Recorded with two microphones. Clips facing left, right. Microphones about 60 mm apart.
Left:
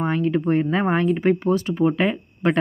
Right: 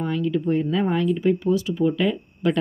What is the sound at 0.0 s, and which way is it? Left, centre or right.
Speech, left.